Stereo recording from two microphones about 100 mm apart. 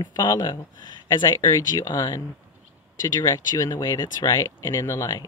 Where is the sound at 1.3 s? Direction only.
30° left (ahead or behind).